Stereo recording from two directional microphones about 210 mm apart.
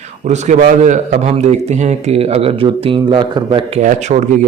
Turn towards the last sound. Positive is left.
turn(degrees=-35)  # may be behind; listen again after turning